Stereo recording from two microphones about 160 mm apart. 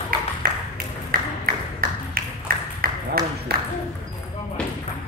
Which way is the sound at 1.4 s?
65° right (ahead or behind).